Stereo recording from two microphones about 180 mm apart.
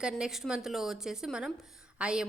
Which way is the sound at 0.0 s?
5° right (ahead or behind).